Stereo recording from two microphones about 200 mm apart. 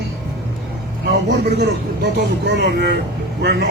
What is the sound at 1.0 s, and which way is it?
A man's voice, 55° right (ahead or behind).